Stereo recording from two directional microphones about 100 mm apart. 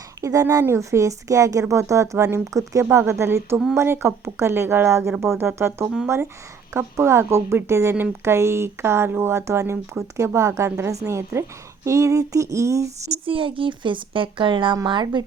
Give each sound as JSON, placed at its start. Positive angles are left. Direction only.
{"t": 0.2, "sound": "speech", "side_deg": -30}
{"t": 13.1, "sound": "speech", "side_deg": -60}